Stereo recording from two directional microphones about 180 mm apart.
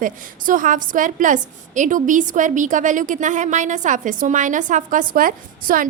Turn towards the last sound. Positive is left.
turn(degrees=-50)  # may be behind; listen again after turning